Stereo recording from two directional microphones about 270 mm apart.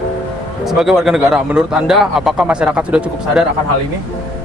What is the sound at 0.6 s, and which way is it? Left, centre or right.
Speech, centre.